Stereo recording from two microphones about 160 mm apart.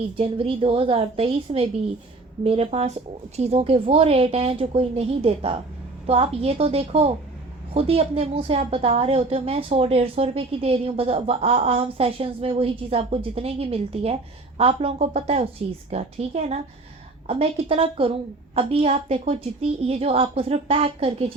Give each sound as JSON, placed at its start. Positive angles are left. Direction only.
{"t": 0.2, "sound": "a woman's voice", "side_deg": -35}